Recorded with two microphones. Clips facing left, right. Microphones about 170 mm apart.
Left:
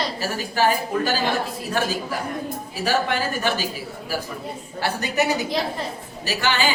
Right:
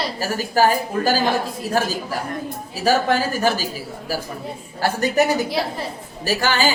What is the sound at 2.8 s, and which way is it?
Speech, 40° right (ahead or behind).